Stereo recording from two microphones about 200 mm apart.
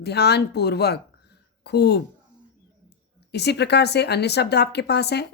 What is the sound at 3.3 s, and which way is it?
Speech, 55° left (ahead or behind).